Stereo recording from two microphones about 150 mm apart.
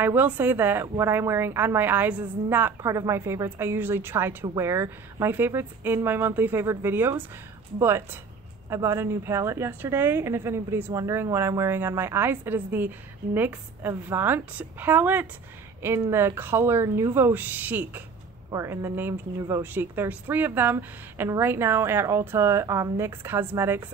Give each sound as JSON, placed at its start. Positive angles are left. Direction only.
{"t": 0.0, "sound": "a woman's voice", "side_deg": -10}